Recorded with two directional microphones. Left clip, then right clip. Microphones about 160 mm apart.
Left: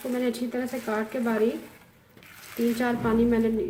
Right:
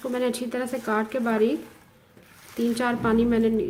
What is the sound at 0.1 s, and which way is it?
Speech, 65° right (ahead or behind).